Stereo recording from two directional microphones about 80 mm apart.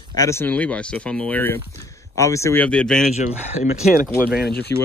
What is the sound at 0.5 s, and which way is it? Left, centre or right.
Speech, centre.